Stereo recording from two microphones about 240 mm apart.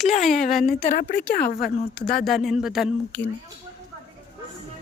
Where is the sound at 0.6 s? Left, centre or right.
Left.